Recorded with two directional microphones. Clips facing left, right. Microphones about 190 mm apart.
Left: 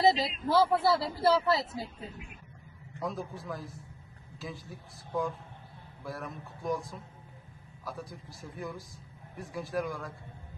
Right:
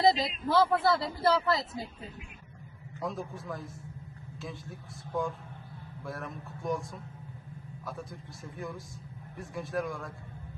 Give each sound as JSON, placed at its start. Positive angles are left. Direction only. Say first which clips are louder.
{"t": 0.1, "sound": "speech", "louder": "even", "side_deg": 30}
{"t": 0.5, "sound": "a man's voice", "louder": "even", "side_deg": 5}
{"t": 3.0, "sound": "a man's voice", "louder": "even", "side_deg": 0}